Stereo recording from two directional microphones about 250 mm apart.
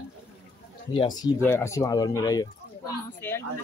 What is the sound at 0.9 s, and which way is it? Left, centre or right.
Speech, centre.